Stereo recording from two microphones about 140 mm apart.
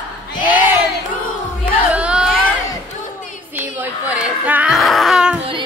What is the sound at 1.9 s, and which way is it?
Speech, 10° right (ahead or behind).